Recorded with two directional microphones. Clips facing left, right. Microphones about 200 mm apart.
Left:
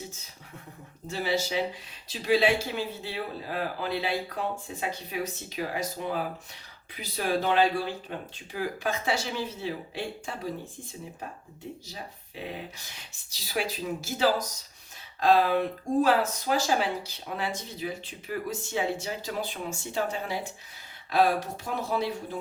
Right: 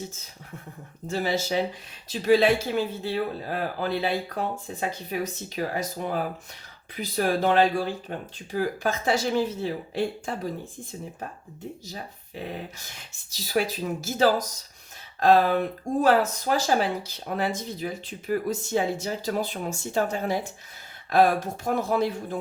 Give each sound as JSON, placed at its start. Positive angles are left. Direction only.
{"t": 1.1, "sound": "speech", "side_deg": -45}
{"t": 13.3, "sound": "speech", "side_deg": -45}